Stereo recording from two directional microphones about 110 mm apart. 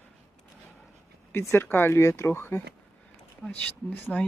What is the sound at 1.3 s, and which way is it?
Speech, 25° left (ahead or behind).